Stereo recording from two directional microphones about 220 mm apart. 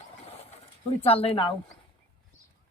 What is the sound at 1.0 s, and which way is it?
Speech, 25° left (ahead or behind).